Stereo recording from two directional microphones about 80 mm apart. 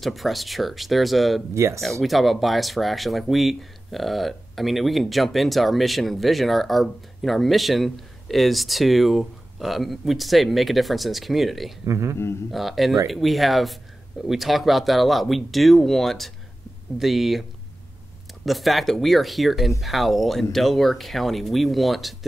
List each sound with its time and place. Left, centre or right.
0.0 s speech: centre
1.5 s speech: right
1.8 s speech: centre
11.8 s speech: right
12.4 s speech: centre